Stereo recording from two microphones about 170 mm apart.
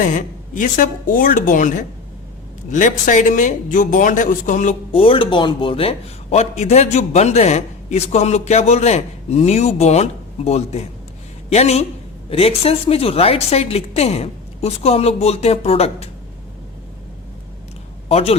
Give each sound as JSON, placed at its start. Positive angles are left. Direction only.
{"t": 0.0, "sound": "a man's voice", "side_deg": 50}
{"t": 4.9, "sound": "a man's voice", "side_deg": 30}
{"t": 18.1, "sound": "a man's voice", "side_deg": 35}